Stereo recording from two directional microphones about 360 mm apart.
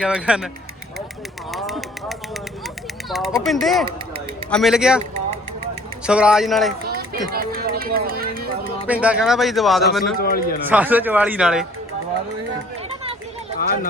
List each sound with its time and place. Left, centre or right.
0.0 s speech: centre
1.5 s a sound: centre
3.9 s run: centre
4.5 s speech: centre
6.1 s speech: centre
6.8 s music: right
7.3 s speech: right
8.9 s speech: centre
10.2 s a man's voice: left
10.7 s speech: centre